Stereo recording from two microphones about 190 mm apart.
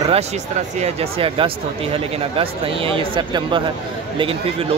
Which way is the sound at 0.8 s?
30° right (ahead or behind).